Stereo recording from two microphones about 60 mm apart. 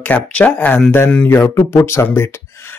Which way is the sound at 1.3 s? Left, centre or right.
Left.